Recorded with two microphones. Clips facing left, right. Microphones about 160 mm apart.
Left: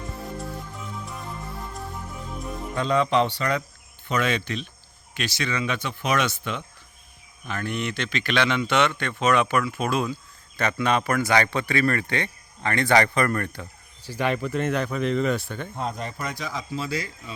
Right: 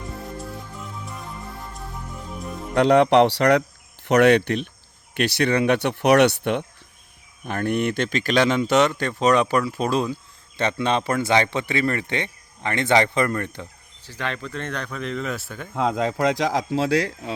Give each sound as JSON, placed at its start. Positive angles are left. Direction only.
{"t": 0.2, "sound": "music", "side_deg": 0}
{"t": 2.7, "sound": "speech", "side_deg": -70}
{"t": 14.0, "sound": "speech", "side_deg": 10}
{"t": 15.7, "sound": "speech", "side_deg": -90}